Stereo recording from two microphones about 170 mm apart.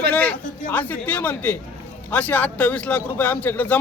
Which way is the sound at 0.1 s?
10° left (ahead or behind).